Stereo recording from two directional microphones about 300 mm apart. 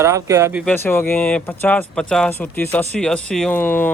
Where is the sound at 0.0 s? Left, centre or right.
Centre.